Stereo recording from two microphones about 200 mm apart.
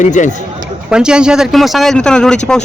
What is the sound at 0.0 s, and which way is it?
Speech, 40° left (ahead or behind).